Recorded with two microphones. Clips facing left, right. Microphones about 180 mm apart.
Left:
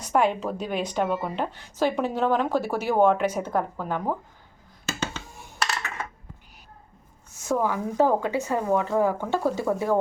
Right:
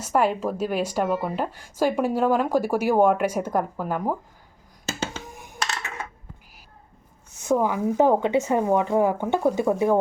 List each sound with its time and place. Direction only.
0.0 s a woman's voice: 5° right (ahead or behind)
5.3 s a sound: 15° right (ahead or behind)
7.4 s speech: 15° right (ahead or behind)